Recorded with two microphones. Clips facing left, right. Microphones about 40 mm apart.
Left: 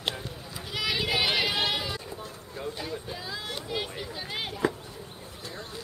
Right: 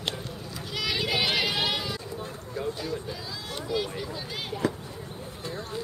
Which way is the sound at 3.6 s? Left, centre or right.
Centre.